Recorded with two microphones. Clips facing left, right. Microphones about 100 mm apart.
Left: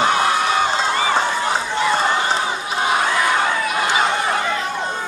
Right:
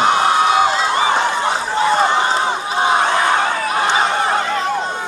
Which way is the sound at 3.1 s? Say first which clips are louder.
Right 2 dB; 40° right (ahead or behind).